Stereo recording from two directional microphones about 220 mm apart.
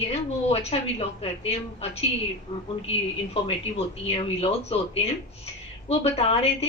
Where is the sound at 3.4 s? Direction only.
25° left (ahead or behind).